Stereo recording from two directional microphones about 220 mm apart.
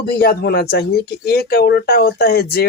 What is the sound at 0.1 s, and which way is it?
Speech, 45° left (ahead or behind).